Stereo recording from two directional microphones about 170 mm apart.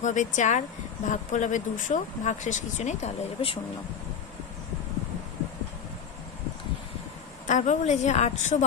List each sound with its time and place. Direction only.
0.0 s speech: 45° left (ahead or behind)
7.4 s speech: 45° left (ahead or behind)